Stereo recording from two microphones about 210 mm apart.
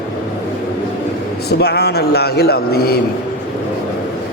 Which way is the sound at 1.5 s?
50° left (ahead or behind).